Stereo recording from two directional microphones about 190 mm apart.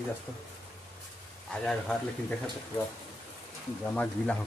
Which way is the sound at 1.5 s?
5° left (ahead or behind).